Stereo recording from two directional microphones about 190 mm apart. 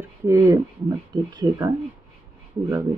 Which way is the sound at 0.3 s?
20° right (ahead or behind).